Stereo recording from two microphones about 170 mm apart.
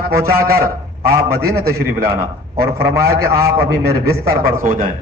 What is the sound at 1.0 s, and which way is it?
Speech, 15° right (ahead or behind).